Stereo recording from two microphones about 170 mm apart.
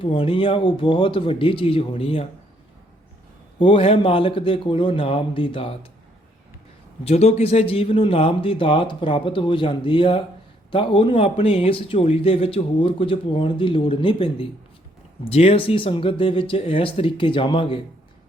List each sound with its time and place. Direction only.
0.0 s speech: 30° left (ahead or behind)
3.6 s speech: 30° left (ahead or behind)
7.0 s speech: 40° left (ahead or behind)